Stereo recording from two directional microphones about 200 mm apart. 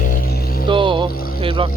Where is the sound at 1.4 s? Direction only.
25° right (ahead or behind).